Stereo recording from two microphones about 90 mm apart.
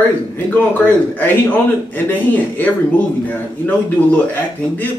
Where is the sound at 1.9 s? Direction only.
20° left (ahead or behind).